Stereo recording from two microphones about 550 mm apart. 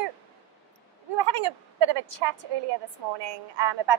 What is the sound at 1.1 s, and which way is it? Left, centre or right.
A woman's voice, right.